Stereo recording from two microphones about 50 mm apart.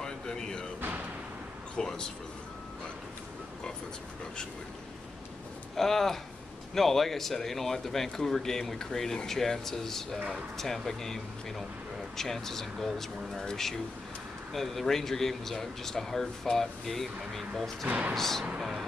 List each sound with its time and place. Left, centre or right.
0.0 s music: centre
0.7 s music: right
1.8 s speech: centre
5.8 s speech: centre
17.8 s speech: right
18.1 s speech: centre